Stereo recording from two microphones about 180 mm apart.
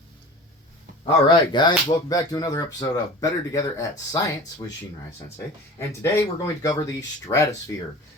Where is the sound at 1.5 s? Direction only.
25° left (ahead or behind).